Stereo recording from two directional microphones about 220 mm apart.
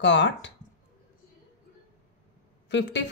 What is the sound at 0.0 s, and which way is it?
Speech, 55° left (ahead or behind).